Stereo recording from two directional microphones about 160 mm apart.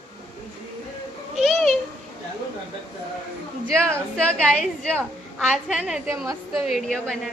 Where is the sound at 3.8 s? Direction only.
5° left (ahead or behind).